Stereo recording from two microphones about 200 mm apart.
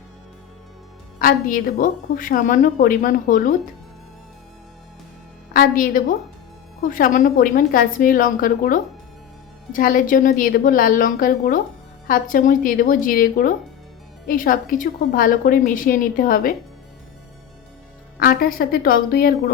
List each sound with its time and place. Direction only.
1.2 s a woman's voice: 45° left (ahead or behind)
5.5 s a woman's voice: 45° left (ahead or behind)
18.2 s a woman's voice: 50° left (ahead or behind)